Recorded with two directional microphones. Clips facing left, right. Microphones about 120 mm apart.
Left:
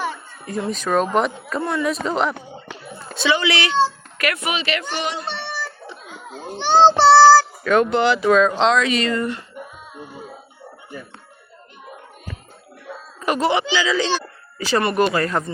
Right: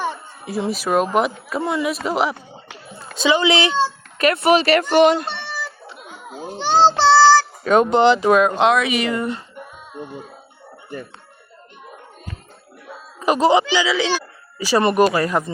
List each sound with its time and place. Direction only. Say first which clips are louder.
0.7 s speech: even; 10° right (ahead or behind)
3.2 s speech: right 3 dB; 20° right (ahead or behind); by 5.2 s 50° right (ahead or behind)
6.2 s child singing: even; 5° right (ahead or behind)
7.6 s speech: right 3 dB; 20° right (ahead or behind)
9.6 s music: right 2 dB; 5° left (ahead or behind)
13.1 s a sound: right 4 dB; 20° right (ahead or behind)
13.7 s speech: right 1 dB; 10° right (ahead or behind)
14.8 s speech: right 3 dB; 25° right (ahead or behind)